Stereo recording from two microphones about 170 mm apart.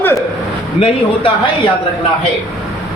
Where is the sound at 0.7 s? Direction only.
35° left (ahead or behind).